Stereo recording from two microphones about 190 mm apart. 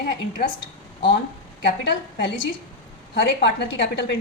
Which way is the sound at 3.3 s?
70° left (ahead or behind).